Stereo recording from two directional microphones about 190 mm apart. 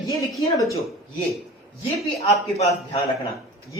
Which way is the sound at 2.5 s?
35° left (ahead or behind).